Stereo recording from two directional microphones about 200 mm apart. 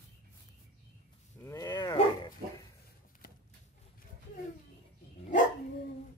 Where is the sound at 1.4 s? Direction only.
20° left (ahead or behind).